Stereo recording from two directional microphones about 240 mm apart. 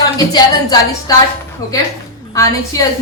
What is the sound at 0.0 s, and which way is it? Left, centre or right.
A woman's voice, centre.